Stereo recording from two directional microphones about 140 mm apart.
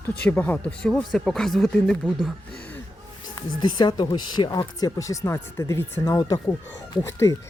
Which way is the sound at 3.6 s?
35° left (ahead or behind).